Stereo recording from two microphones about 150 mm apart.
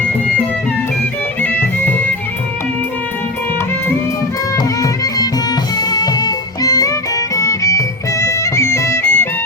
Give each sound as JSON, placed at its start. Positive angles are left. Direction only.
{"t": 4.5, "sound": "music", "side_deg": 25}